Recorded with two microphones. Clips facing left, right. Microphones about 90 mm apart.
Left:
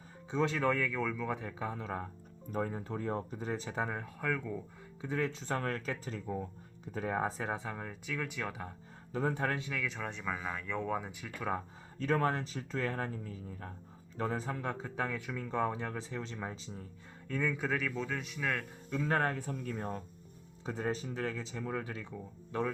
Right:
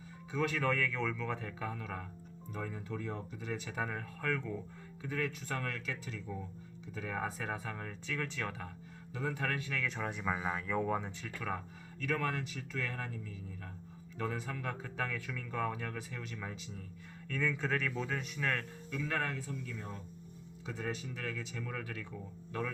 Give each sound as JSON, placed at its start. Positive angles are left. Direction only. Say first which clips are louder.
{"t": 0.3, "sound": "speech", "louder": "left 2 dB", "side_deg": 25}
{"t": 2.5, "sound": "speech", "louder": "left 5 dB", "side_deg": 40}
{"t": 5.0, "sound": "speech", "louder": "left 3 dB", "side_deg": 25}
{"t": 9.1, "sound": "speech", "louder": "left 4 dB", "side_deg": 35}
{"t": 9.8, "sound": "speech", "louder": "right 1 dB", "side_deg": 0}
{"t": 11.3, "sound": "speech", "louder": "left 4 dB", "side_deg": 20}
{"t": 11.9, "sound": "speech", "louder": "left 4 dB", "side_deg": 35}
{"t": 17.2, "sound": "speech", "louder": "left 1 dB", "side_deg": 20}
{"t": 17.7, "sound": "speech", "louder": "left 1 dB", "side_deg": 0}
{"t": 18.9, "sound": "speech", "louder": "left 5 dB", "side_deg": 35}
{"t": 20.7, "sound": "speech", "louder": "left 4 dB", "side_deg": 35}